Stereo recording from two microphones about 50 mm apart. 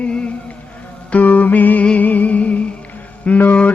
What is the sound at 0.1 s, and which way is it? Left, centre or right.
Music, left.